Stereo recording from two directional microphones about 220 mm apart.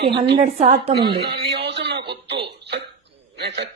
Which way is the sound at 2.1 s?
50° right (ahead or behind).